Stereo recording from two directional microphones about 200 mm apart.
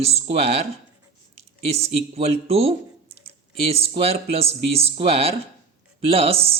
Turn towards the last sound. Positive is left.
turn(degrees=-30)  # may be behind; listen again after turning